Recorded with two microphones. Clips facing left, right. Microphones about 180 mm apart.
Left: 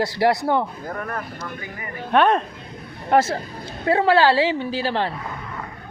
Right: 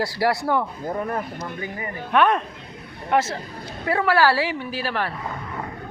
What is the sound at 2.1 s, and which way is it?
Speech, 30° left (ahead or behind).